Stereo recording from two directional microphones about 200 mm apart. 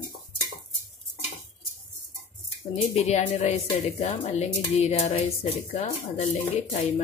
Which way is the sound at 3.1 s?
35° left (ahead or behind).